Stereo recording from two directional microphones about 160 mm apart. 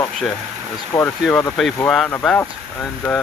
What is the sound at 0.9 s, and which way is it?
Speech, 35° left (ahead or behind).